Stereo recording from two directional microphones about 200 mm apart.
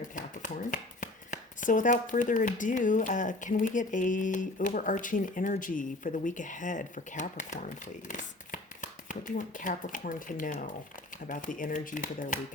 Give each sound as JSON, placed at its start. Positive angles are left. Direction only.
{"t": 0.2, "sound": "speech", "side_deg": 40}